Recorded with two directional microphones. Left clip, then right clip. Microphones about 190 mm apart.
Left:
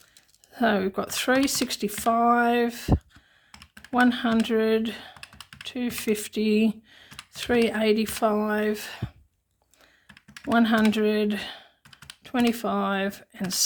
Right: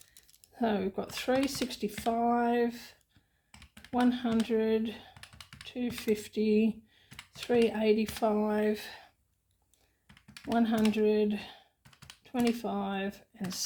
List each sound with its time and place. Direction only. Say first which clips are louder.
0.5 s speech: left 8 dB; 40° left (ahead or behind)
3.9 s speech: left 7 dB; 40° left (ahead or behind)
10.5 s speech: left 7 dB; 45° left (ahead or behind)